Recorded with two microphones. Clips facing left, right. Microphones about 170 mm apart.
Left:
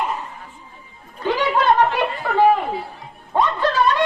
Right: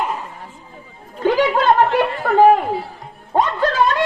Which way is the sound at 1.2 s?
50° right (ahead or behind).